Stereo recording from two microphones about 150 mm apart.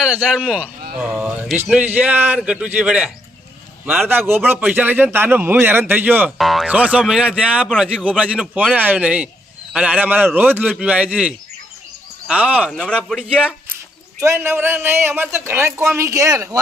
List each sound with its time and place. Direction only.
0.0 s a man's voice: centre (ahead or behind)
4.3 s a man's voice: 15° right (ahead or behind)
6.3 s a man's voice: centre (ahead or behind)
12.9 s speech: 5° left (ahead or behind)
14.2 s a man's voice: 15° right (ahead or behind)